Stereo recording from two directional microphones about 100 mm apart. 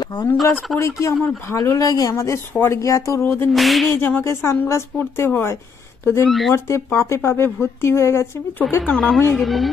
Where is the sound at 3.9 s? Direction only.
20° left (ahead or behind).